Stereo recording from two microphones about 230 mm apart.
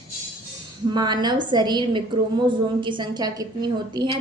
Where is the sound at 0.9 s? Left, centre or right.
Centre.